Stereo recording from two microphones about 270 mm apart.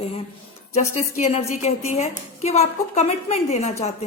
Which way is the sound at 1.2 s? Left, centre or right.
Left.